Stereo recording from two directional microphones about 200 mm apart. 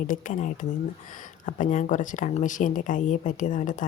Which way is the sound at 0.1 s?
40° left (ahead or behind).